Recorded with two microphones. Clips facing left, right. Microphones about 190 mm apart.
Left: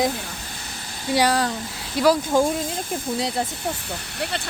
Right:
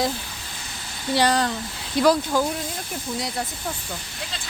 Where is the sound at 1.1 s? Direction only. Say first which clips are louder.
Left 1 dB; 10° left (ahead or behind).